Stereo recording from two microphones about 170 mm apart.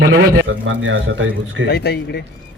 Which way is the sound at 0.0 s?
65° right (ahead or behind).